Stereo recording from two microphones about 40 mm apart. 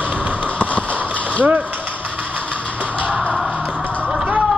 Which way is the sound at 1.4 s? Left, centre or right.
Right.